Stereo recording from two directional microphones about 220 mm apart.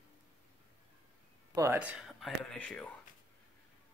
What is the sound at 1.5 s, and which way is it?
Speech, 15° right (ahead or behind).